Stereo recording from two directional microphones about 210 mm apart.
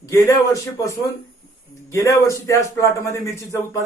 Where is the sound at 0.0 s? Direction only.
15° left (ahead or behind).